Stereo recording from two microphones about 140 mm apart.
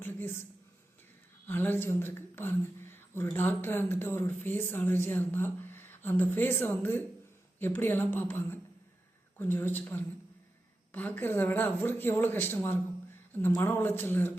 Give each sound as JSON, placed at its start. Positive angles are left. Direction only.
{"t": 0.0, "sound": "a woman's voice", "side_deg": 15}
{"t": 1.5, "sound": "a woman's voice", "side_deg": 15}